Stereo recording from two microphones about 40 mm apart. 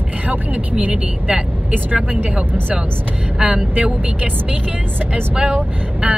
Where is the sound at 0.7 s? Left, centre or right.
Right.